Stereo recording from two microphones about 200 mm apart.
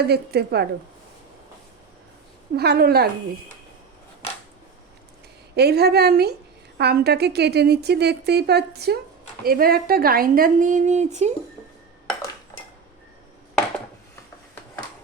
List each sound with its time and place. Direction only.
0.0 s a woman's voice: 55° right (ahead or behind)
2.6 s a woman's voice: 55° right (ahead or behind)
5.5 s a woman's voice: 55° right (ahead or behind); by 11.3 s 35° right (ahead or behind)